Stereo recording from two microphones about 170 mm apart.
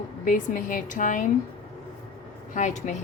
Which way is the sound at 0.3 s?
50° left (ahead or behind).